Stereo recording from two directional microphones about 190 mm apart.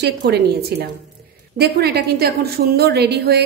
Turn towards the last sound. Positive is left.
turn(degrees=-60)  # may be behind; listen again after turning